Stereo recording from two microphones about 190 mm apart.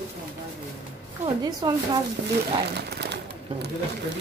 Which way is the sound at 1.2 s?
20° right (ahead or behind).